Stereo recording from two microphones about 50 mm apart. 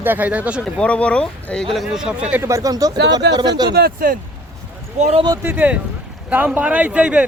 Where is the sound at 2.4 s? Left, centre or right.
Right.